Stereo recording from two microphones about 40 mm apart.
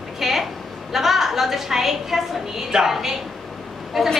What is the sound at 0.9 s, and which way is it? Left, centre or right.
A woman's voice, centre.